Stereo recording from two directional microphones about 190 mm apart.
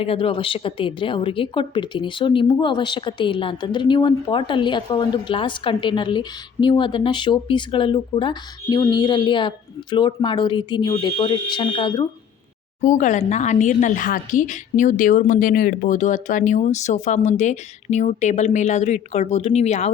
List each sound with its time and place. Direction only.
0.0 s a woman's voice: 30° left (ahead or behind)
12.8 s a woman's voice: 40° left (ahead or behind)